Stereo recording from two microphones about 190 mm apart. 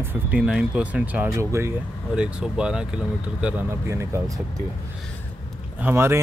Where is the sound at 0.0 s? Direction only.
10° right (ahead or behind).